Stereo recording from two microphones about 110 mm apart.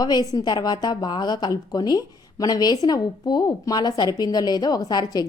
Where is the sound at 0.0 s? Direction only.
35° left (ahead or behind).